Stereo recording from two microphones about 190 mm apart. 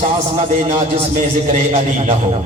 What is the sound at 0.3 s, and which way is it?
A man's voice, 35° right (ahead or behind).